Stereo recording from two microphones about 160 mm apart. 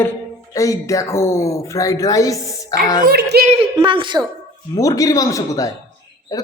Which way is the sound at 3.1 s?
75° right (ahead or behind).